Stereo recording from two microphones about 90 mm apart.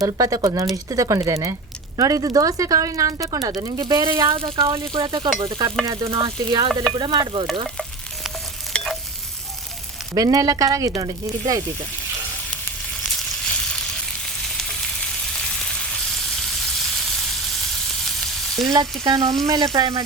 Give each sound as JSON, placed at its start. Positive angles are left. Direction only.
{"t": 0.0, "sound": "speech", "side_deg": -40}
{"t": 4.0, "sound": "a woman's voice", "side_deg": -60}
{"t": 4.4, "sound": "speech", "side_deg": -75}
{"t": 5.0, "sound": "a woman's voice", "side_deg": -55}
{"t": 5.5, "sound": "speech", "side_deg": -65}
{"t": 5.8, "sound": "speech", "side_deg": -45}
{"t": 6.9, "sound": "a woman's voice", "side_deg": -55}
{"t": 8.7, "sound": "frying", "side_deg": 5}
{"t": 10.2, "sound": "speech", "side_deg": -40}
{"t": 13.0, "sound": "frying", "side_deg": 5}
{"t": 15.4, "sound": "frying", "side_deg": 10}
{"t": 19.0, "sound": "speech", "side_deg": -50}